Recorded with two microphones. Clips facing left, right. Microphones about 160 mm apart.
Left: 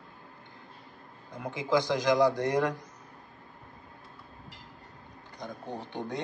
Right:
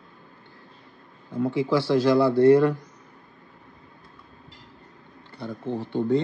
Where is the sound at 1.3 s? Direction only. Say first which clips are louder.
Right 5 dB; 15° left (ahead or behind).